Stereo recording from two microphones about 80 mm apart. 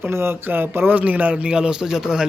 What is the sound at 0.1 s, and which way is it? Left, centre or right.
A man's voice, right.